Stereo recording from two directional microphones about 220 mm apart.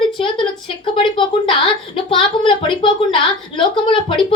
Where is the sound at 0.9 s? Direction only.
20° left (ahead or behind).